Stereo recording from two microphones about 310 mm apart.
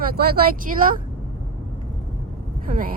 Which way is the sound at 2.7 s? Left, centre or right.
Right.